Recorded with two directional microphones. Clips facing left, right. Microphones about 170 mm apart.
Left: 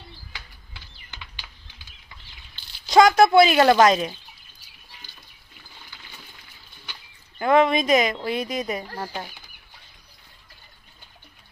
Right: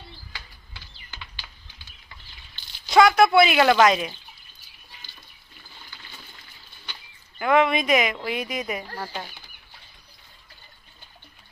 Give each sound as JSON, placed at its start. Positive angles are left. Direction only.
{"t": 2.9, "sound": "speech", "side_deg": 40}
{"t": 7.3, "sound": "speech", "side_deg": 35}
{"t": 8.8, "sound": "speech", "side_deg": 10}